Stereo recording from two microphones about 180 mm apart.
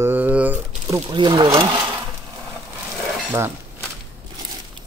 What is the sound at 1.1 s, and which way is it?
Speech, 25° right (ahead or behind).